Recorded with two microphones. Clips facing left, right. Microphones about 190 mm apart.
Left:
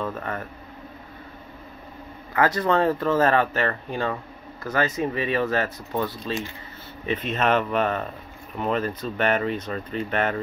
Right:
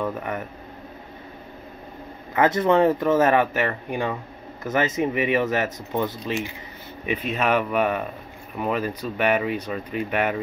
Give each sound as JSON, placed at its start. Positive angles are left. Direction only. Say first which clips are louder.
{"t": 0.0, "sound": "speech", "louder": "right 2 dB", "side_deg": -15}
{"t": 2.3, "sound": "speech", "louder": "right 3 dB", "side_deg": -20}